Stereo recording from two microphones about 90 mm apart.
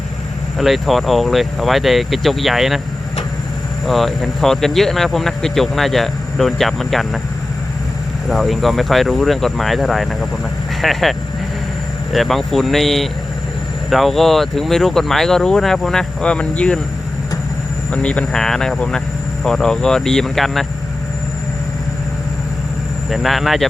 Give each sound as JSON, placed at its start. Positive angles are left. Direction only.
{"t": 0.6, "sound": "speech", "side_deg": 0}
{"t": 3.8, "sound": "speech", "side_deg": 0}
{"t": 8.3, "sound": "speech", "side_deg": 0}
{"t": 12.1, "sound": "speech", "side_deg": 0}
{"t": 17.9, "sound": "speech", "side_deg": 10}
{"t": 23.0, "sound": "speech", "side_deg": 0}